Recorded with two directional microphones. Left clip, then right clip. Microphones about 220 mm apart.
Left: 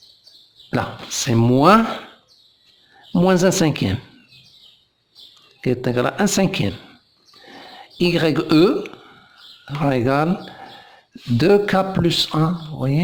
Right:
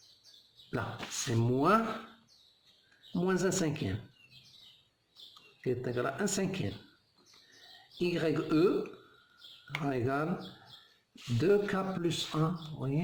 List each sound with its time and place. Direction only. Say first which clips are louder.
0.7 s speech: left 14 dB; 45° left (ahead or behind)
3.2 s speech: left 15 dB; 45° left (ahead or behind)
5.6 s speech: left 13 dB; 50° left (ahead or behind)
7.9 s speech: left 13 dB; 45° left (ahead or behind)
9.8 s speech: left 15 dB; 45° left (ahead or behind)
11.3 s speech: left 13 dB; 45° left (ahead or behind)